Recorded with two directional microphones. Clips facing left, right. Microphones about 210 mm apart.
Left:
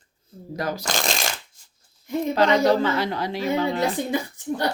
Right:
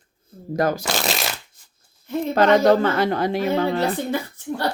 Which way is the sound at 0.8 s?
5° right (ahead or behind).